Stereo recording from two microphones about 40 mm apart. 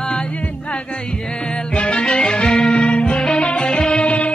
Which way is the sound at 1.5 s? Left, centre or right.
Left.